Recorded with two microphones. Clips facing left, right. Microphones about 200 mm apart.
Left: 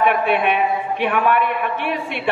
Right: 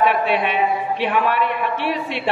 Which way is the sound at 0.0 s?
55° left (ahead or behind).